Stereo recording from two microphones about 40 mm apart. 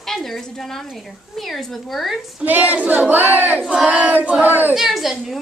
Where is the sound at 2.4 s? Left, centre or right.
Right.